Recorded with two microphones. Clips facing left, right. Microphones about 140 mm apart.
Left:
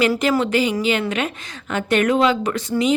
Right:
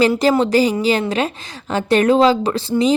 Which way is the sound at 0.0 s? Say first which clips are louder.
Right 4 dB; 35° right (ahead or behind).